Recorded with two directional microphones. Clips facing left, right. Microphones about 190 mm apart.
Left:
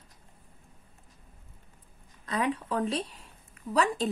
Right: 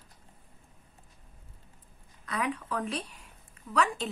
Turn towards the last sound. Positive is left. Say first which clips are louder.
# left 2 dB
turn(degrees=35)  # may be behind; listen again after turning